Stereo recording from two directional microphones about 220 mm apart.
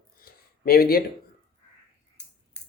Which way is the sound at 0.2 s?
40° left (ahead or behind).